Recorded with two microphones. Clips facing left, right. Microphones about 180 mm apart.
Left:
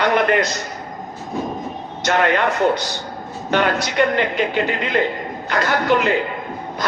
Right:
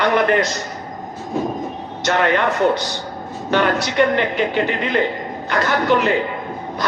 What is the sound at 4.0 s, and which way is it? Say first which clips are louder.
Speech: right 1 dB; 25° right (ahead or behind).